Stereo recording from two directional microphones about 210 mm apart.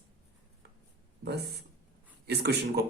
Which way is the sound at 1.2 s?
50° right (ahead or behind).